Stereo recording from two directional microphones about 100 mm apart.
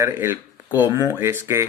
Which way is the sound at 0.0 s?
25° right (ahead or behind).